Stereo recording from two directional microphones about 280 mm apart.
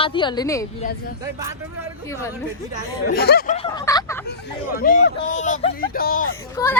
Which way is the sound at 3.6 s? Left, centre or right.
Centre.